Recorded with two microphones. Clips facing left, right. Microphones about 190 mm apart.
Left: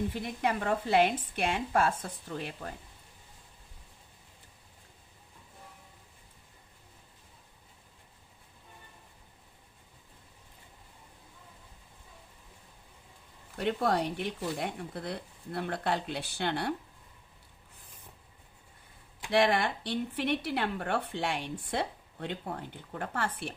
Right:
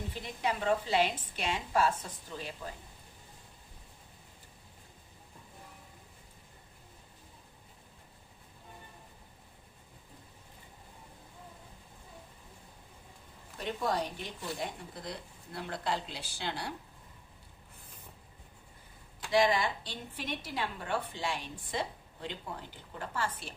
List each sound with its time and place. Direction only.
0.4 s a woman's voice: 55° left (ahead or behind)
13.6 s a woman's voice: 65° left (ahead or behind)
19.3 s a woman's voice: 60° left (ahead or behind)